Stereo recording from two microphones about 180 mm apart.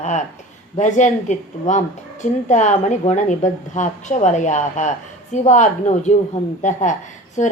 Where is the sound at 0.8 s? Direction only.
40° left (ahead or behind).